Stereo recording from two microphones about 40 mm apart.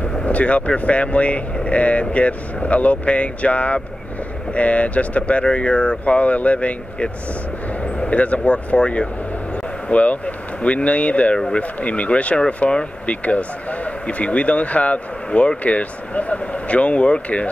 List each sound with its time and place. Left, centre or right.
0.2 s speech: left